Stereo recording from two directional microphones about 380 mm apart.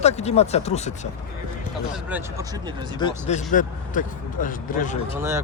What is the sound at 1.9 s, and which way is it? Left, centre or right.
Speech, centre.